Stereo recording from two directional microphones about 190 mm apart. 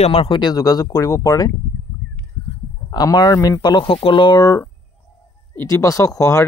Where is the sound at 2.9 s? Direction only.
20° left (ahead or behind).